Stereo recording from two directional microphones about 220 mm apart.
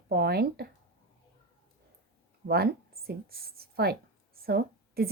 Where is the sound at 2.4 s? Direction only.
45° right (ahead or behind).